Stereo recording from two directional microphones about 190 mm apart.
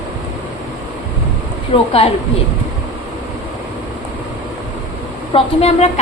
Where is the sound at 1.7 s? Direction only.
25° left (ahead or behind).